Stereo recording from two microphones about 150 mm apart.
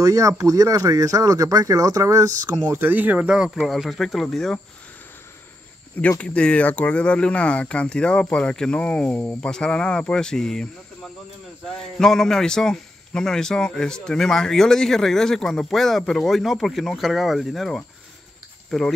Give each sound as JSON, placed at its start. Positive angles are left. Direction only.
{"t": 0.0, "sound": "a man's voice", "side_deg": -20}
{"t": 5.9, "sound": "a man's voice", "side_deg": 10}